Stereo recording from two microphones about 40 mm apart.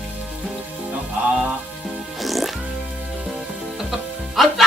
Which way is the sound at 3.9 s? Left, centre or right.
Centre.